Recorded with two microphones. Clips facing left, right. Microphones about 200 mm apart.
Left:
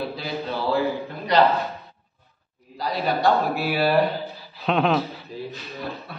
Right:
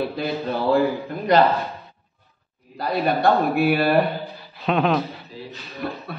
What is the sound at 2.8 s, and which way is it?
A man's voice, 55° right (ahead or behind).